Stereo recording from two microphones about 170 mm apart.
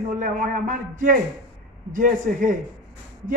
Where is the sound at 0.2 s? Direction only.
50° right (ahead or behind).